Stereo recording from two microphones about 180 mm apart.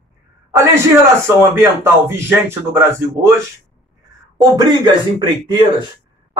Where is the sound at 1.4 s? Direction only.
15° right (ahead or behind).